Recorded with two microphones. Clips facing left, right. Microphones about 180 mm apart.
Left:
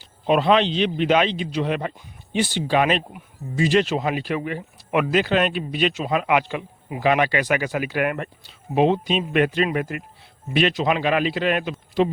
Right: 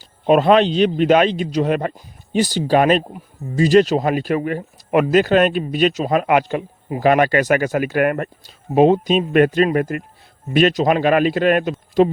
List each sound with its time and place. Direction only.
0.0 s speech: 45° right (ahead or behind)